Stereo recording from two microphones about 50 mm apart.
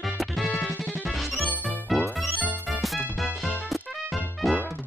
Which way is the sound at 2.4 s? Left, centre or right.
Right.